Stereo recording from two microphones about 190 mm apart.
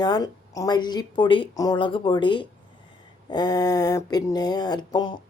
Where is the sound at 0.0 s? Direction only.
20° left (ahead or behind).